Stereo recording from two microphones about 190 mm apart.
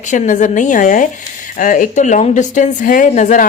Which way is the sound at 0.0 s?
40° left (ahead or behind).